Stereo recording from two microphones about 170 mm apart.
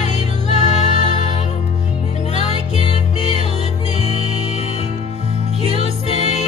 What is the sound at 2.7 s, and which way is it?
Music, 40° left (ahead or behind).